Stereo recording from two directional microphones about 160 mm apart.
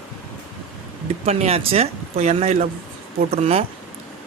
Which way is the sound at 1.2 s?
40° right (ahead or behind).